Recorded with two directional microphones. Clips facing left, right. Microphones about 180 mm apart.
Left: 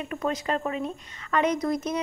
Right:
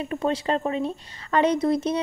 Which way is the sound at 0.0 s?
30° right (ahead or behind).